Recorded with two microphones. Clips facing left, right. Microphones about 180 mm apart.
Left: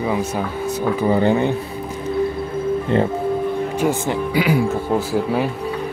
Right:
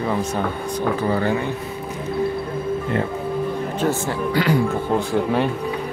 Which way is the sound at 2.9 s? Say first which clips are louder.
Left 6 dB; 25° left (ahead or behind).